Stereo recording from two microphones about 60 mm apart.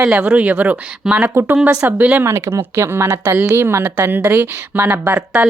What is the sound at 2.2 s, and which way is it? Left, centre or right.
A woman's voice, right.